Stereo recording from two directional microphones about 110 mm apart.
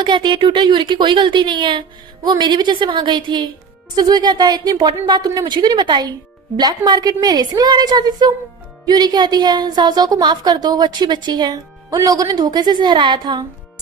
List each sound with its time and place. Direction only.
0.0 s a woman's voice: 45° right (ahead or behind)